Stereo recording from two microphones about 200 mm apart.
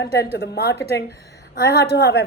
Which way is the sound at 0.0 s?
55° left (ahead or behind).